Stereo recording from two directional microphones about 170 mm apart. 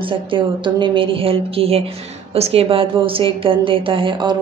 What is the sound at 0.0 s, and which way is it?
A woman's voice, 30° right (ahead or behind).